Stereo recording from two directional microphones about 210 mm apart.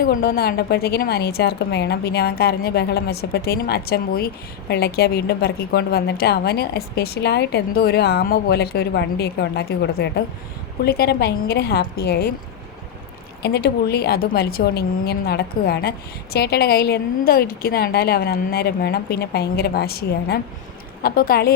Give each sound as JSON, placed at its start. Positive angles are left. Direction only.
{"t": 0.0, "sound": "a woman's voice", "side_deg": 45}
{"t": 13.4, "sound": "a woman's voice", "side_deg": 50}